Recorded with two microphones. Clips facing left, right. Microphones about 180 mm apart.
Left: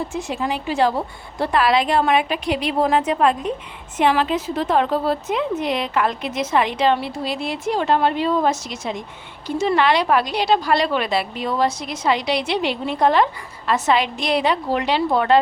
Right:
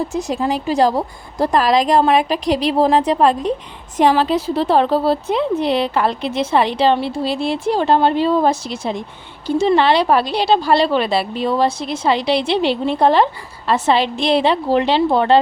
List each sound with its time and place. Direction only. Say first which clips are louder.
0.1 s a woman's voice: right 5 dB; 40° right (ahead or behind)